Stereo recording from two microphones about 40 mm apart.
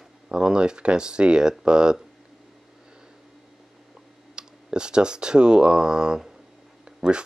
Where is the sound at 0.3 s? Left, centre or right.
Centre.